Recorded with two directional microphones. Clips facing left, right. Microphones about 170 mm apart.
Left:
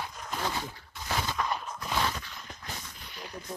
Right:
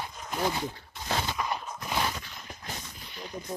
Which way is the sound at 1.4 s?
15° right (ahead or behind).